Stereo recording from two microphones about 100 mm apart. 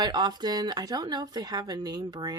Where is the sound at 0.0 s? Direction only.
45° right (ahead or behind).